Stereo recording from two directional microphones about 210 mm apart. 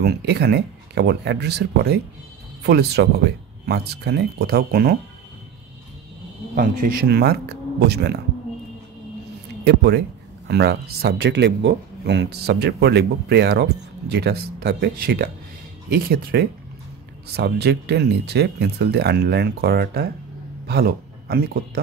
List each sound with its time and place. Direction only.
0.0 s speech: 50° right (ahead or behind)
6.5 s speech: 45° right (ahead or behind)
9.7 s a man's voice: 50° right (ahead or behind)